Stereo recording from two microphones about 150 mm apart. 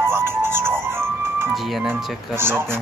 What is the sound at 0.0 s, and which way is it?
Music, 15° right (ahead or behind).